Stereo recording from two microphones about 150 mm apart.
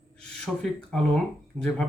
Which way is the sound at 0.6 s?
5° left (ahead or behind).